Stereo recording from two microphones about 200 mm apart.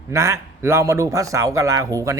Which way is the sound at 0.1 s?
15° right (ahead or behind).